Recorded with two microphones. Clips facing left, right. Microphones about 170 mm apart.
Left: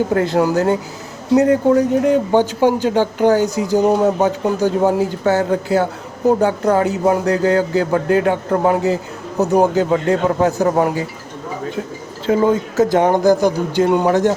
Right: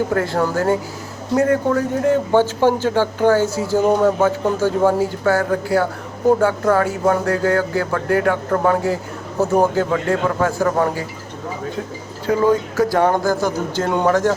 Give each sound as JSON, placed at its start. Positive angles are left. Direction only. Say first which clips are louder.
{"t": 0.1, "sound": "speech", "louder": "left 4 dB", "side_deg": 20}
{"t": 12.2, "sound": "speech", "louder": "left 1 dB", "side_deg": 20}